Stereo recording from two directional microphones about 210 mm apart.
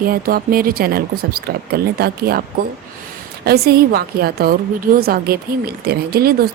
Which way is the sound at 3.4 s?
50° right (ahead or behind).